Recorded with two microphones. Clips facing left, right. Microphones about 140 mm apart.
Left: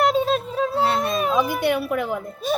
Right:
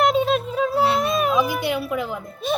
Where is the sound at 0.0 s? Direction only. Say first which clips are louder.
Right 1 dB; 35° left (ahead or behind).